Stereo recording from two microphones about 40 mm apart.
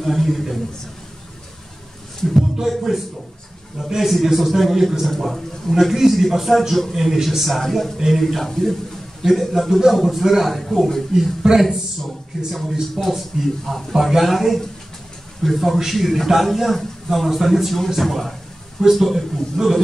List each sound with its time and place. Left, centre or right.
0.0 s a man's voice: centre
2.3 s a man's voice: centre
11.4 s speech: centre
12.4 s a man's voice: centre
13.7 s a man's voice: centre
13.9 s a man's voice: centre